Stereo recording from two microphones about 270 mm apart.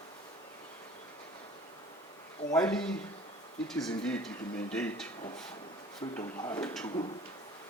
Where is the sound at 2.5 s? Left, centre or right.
Centre.